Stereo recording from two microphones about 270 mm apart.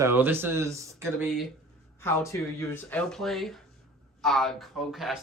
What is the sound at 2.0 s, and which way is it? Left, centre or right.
Speech, centre.